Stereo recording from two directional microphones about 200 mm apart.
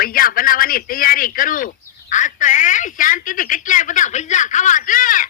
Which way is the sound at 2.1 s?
40° left (ahead or behind).